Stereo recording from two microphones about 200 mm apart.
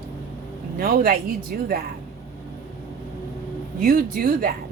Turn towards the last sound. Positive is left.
turn(degrees=-45)  # may be behind; listen again after turning